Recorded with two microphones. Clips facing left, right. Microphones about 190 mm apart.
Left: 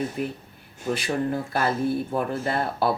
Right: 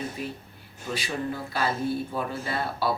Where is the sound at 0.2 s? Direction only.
60° left (ahead or behind).